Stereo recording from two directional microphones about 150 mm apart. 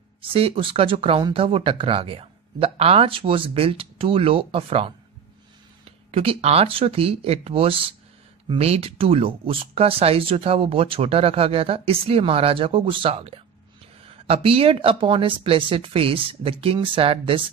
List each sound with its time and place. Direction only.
0.2 s speech: 40° right (ahead or behind)